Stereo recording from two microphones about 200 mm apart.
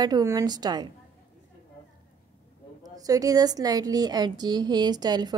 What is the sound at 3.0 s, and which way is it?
A woman's voice, 15° right (ahead or behind).